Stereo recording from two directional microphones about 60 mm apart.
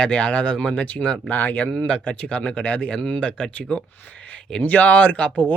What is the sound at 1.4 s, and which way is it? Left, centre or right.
Speech, left.